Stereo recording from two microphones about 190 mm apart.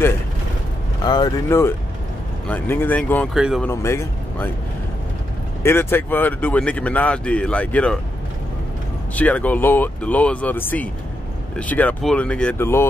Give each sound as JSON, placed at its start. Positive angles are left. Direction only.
{"t": 1.0, "sound": "speech", "side_deg": 20}
{"t": 3.3, "sound": "speech", "side_deg": -5}
{"t": 3.6, "sound": "speech", "side_deg": 15}
{"t": 5.6, "sound": "speech", "side_deg": 10}
{"t": 9.1, "sound": "speech", "side_deg": 5}